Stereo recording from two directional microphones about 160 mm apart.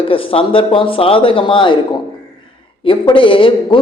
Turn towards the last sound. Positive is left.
turn(degrees=30)  # may be behind; listen again after turning